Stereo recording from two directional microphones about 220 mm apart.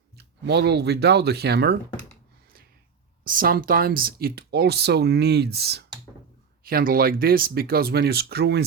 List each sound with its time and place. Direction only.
0.2 s speech: 50° right (ahead or behind)
3.2 s speech: 40° right (ahead or behind)